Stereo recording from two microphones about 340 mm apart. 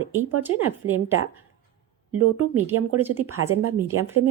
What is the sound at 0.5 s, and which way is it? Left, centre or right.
Speech, right.